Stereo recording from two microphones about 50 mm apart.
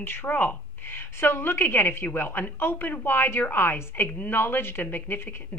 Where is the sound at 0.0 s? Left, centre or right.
Left.